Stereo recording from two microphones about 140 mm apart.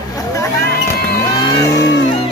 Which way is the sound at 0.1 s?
20° left (ahead or behind).